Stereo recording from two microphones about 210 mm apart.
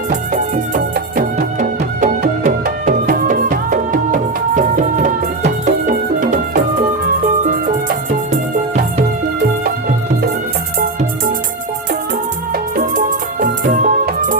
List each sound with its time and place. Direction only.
0.1 s music: 35° right (ahead or behind)
13.4 s music: 40° right (ahead or behind)